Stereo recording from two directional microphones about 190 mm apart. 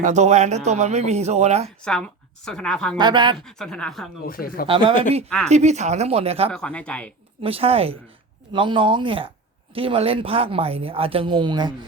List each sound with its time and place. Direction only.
0.0 s speech: 35° right (ahead or behind)
1.8 s a woman's voice: 5° left (ahead or behind)
3.0 s speech: 25° right (ahead or behind)
3.4 s a woman's voice: 5° left (ahead or behind)
4.3 s speech: 50° left (ahead or behind)
4.6 s speech: 25° right (ahead or behind)
6.5 s speech: 5° left (ahead or behind)
7.4 s speech: 30° right (ahead or behind)